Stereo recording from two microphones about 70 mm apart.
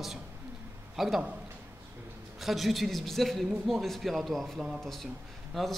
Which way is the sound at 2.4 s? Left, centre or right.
Centre.